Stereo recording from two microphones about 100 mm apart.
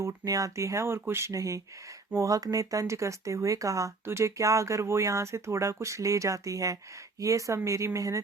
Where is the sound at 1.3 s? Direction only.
35° right (ahead or behind).